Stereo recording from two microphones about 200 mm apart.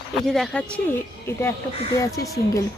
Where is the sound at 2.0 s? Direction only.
15° left (ahead or behind).